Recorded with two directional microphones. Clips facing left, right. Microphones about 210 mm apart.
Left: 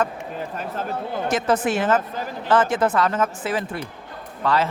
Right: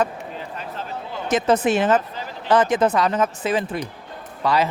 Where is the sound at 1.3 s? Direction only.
20° right (ahead or behind).